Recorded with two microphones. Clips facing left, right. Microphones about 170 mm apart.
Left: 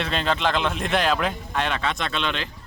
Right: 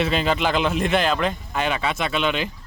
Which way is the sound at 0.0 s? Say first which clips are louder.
Right 3 dB; 5° right (ahead or behind).